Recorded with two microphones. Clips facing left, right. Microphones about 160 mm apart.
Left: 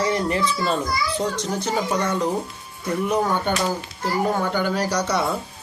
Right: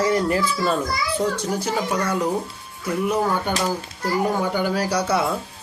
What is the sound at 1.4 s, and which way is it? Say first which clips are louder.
Speech: even; 10° right (ahead or behind).